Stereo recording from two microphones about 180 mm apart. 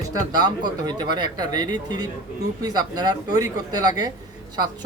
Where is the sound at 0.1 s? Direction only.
20° right (ahead or behind).